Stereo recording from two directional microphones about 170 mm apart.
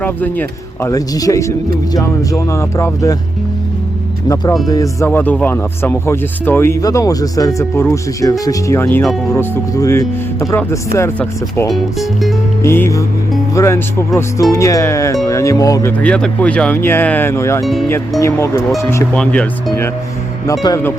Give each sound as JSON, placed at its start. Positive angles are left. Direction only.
{"t": 0.0, "sound": "speech", "side_deg": 10}
{"t": 4.7, "sound": "speech", "side_deg": 20}
{"t": 11.7, "sound": "speech", "side_deg": 0}
{"t": 12.6, "sound": "speech", "side_deg": 15}